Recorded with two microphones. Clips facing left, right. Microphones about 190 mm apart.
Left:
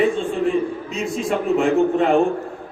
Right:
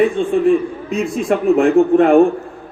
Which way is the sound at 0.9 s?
55° right (ahead or behind).